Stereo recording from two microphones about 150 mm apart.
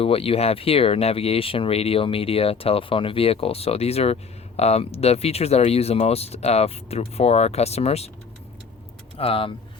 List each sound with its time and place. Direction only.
0.0 s speech: 40° left (ahead or behind)
9.1 s speech: 40° left (ahead or behind)